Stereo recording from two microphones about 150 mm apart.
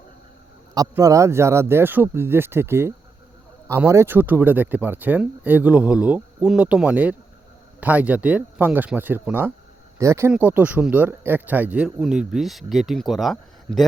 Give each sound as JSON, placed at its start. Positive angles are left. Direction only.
{"t": 0.7, "sound": "speech", "side_deg": -25}